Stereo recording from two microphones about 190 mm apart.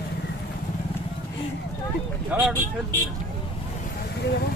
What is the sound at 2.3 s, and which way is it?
Speech, 10° right (ahead or behind).